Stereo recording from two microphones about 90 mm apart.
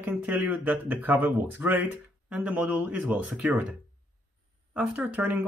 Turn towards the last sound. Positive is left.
turn(degrees=-15)  # may be behind; listen again after turning